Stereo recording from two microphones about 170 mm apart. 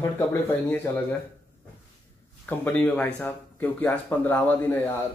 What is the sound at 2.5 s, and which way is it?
Speech, 5° left (ahead or behind).